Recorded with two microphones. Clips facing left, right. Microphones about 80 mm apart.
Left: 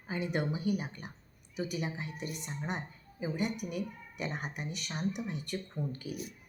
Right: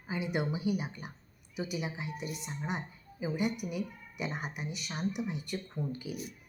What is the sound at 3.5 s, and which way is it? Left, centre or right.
Speech, left.